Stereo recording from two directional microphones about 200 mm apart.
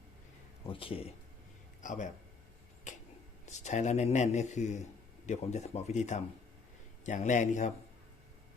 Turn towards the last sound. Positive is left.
turn(degrees=35)  # may be behind; listen again after turning